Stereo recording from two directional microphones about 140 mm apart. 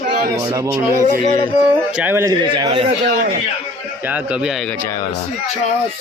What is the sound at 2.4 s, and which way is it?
Speech, 35° right (ahead or behind).